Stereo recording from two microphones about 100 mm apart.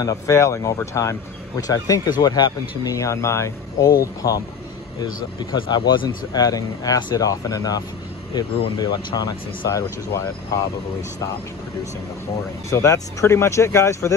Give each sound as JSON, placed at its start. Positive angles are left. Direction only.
{"t": 0.0, "sound": "a man's voice", "side_deg": 30}
{"t": 12.6, "sound": "speech", "side_deg": 30}